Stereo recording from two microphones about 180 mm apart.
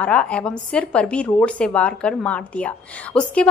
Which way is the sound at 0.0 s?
5° left (ahead or behind).